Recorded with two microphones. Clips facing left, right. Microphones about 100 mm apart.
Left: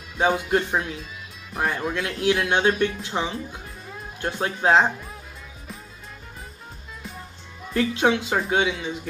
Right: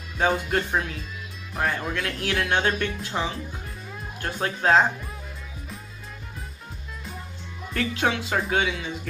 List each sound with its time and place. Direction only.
0.3 s speech: 10° left (ahead or behind)
2.0 s speech: 15° left (ahead or behind)
7.7 s speech: 15° left (ahead or behind)